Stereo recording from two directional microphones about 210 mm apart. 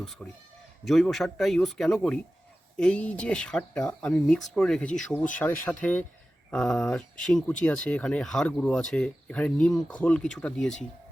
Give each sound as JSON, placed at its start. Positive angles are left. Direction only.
{"t": 0.0, "sound": "speech", "side_deg": 0}